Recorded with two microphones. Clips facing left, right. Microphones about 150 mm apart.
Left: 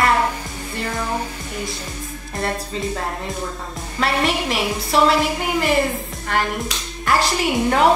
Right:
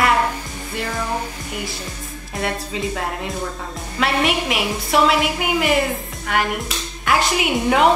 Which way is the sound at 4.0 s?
5° right (ahead or behind).